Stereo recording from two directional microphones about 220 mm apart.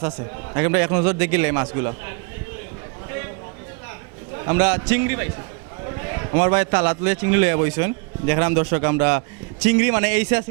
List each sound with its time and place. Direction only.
0.5 s a man's voice: 15° right (ahead or behind)
4.4 s a man's voice: 10° right (ahead or behind)